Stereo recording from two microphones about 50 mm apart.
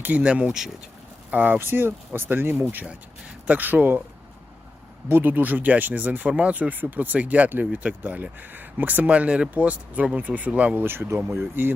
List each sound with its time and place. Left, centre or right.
0.0 s speech: right
1.5 s speech: right
2.8 s speech: right
3.6 s speech: right
5.0 s speech: right
10.8 s speech: right